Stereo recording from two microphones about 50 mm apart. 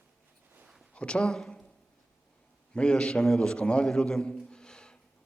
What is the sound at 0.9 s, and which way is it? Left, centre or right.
Speech, centre.